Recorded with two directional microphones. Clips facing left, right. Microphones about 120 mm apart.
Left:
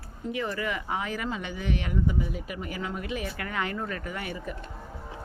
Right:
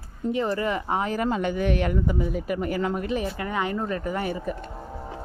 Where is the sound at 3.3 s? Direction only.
25° right (ahead or behind).